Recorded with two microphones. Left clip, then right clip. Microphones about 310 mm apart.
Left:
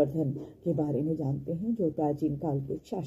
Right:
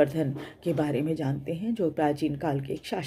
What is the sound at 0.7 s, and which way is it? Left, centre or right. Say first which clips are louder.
Speech: right 3 dB; right.